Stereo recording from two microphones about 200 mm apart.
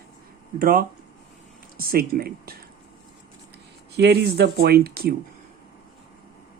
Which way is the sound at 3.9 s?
55° right (ahead or behind).